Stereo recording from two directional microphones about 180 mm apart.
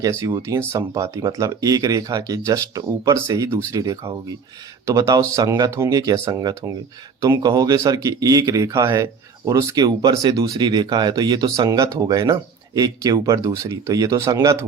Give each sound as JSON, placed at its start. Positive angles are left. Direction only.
{"t": 0.0, "sound": "speech", "side_deg": -20}